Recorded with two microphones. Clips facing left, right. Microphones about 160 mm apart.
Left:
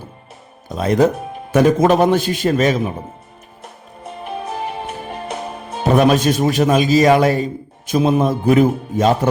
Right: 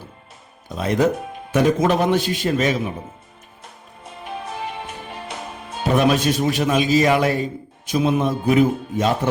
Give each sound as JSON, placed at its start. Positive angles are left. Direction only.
{"t": 0.8, "sound": "speech", "side_deg": 40}
{"t": 5.8, "sound": "speech", "side_deg": 45}